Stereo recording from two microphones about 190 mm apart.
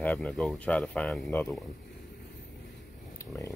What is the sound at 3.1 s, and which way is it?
Pig, 15° left (ahead or behind).